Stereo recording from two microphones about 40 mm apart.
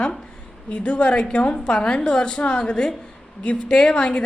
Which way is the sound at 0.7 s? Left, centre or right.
Left.